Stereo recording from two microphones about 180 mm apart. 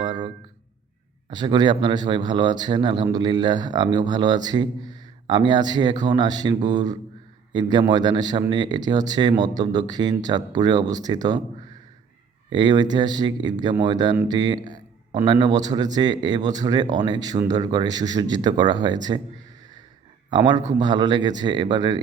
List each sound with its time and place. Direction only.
0.0 s music: 25° right (ahead or behind)
1.3 s speech: 25° right (ahead or behind)
12.5 s speech: 25° right (ahead or behind)
20.3 s speech: 25° right (ahead or behind)